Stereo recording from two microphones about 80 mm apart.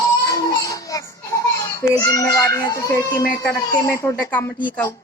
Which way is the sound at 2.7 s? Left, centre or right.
Left.